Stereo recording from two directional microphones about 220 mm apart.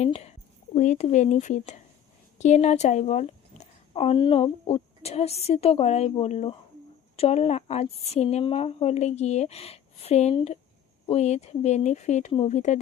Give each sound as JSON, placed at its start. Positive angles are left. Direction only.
{"t": 0.0, "sound": "a woman's voice", "side_deg": 30}